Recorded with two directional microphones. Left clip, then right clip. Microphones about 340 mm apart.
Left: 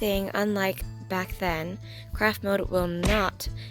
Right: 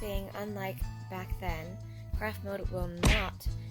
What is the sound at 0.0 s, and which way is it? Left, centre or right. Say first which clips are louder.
Speech: left 12 dB; left.